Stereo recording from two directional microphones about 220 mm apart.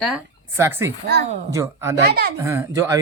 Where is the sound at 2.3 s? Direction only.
10° right (ahead or behind).